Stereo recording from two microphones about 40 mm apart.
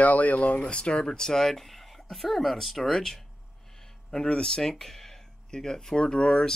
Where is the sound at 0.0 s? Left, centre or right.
Left.